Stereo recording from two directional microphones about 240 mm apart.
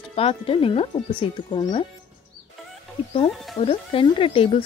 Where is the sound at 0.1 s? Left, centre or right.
Left.